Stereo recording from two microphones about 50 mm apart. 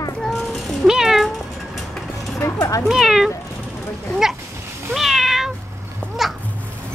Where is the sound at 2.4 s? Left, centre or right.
Left.